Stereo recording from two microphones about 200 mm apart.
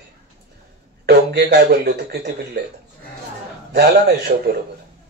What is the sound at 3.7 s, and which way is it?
Speech, 55° right (ahead or behind).